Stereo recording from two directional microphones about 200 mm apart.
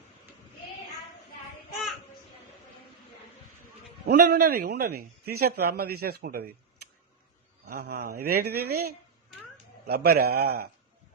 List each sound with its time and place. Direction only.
4.0 s a man's voice: 50° right (ahead or behind)